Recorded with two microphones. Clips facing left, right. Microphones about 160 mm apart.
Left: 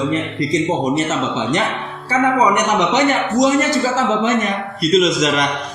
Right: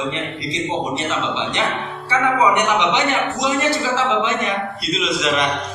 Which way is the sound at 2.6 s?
40° left (ahead or behind).